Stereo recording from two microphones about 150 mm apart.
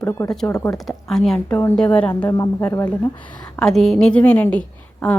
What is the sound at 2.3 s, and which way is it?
Speech, 25° left (ahead or behind).